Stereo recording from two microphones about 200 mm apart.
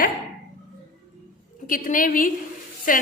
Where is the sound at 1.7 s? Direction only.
45° left (ahead or behind).